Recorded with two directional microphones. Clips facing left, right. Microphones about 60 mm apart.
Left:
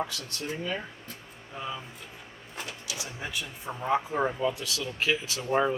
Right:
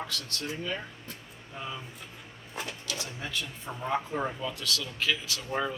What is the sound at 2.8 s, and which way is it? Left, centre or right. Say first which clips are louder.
Speech: even; centre.